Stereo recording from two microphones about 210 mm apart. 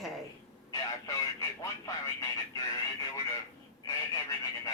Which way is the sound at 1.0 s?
15° left (ahead or behind).